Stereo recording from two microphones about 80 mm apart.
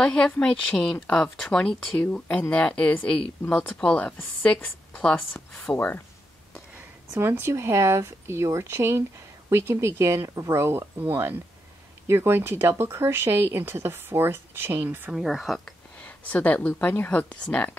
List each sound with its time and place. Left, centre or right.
0.0 s a woman's voice: centre
1.6 s a woman's voice: centre
5.5 s a woman's voice: centre
6.7 s speech: right
15.1 s speech: centre
15.6 s a woman's voice: centre